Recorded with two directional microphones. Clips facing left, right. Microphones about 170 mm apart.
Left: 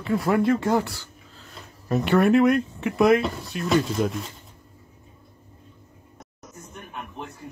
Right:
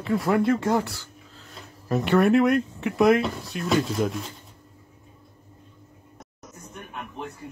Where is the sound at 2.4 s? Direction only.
45° right (ahead or behind).